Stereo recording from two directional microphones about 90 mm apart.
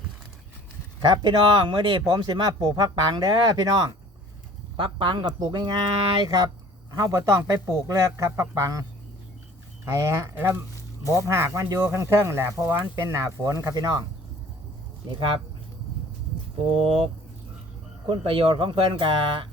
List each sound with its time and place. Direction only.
1.0 s speech: 55° right (ahead or behind)
4.8 s speech: 70° right (ahead or behind)
6.1 s speech: 45° right (ahead or behind)
9.8 s speech: 35° right (ahead or behind)
15.1 s speech: 80° right
18.1 s speech: 80° right